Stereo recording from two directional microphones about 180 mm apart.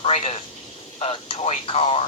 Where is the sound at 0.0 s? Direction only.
35° left (ahead or behind).